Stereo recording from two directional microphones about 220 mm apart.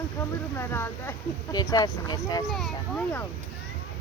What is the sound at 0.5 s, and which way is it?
Speech, 10° left (ahead or behind).